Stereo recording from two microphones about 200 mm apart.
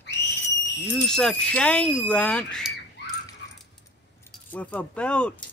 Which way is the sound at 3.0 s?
60° left (ahead or behind).